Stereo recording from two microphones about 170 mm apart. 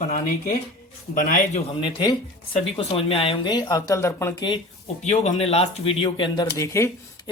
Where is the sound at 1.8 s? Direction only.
25° left (ahead or behind).